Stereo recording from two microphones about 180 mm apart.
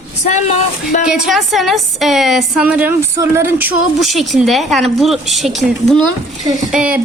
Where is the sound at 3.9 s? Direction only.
Centre (ahead or behind).